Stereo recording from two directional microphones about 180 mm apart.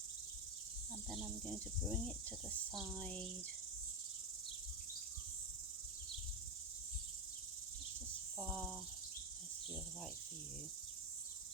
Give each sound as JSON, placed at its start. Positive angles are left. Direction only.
{"t": 1.1, "sound": "insect", "side_deg": 0}
{"t": 8.4, "sound": "cricket", "side_deg": 0}